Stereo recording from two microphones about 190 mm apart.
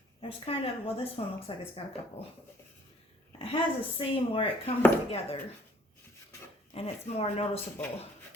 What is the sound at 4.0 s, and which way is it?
Speech, 30° left (ahead or behind).